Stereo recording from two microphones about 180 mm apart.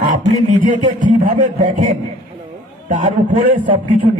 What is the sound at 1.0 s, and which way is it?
Speech, 45° right (ahead or behind).